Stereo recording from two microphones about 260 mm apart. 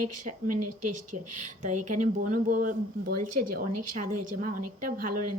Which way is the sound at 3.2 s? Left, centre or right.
Right.